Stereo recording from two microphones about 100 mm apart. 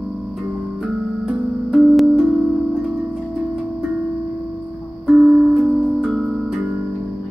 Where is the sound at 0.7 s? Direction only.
Centre (ahead or behind).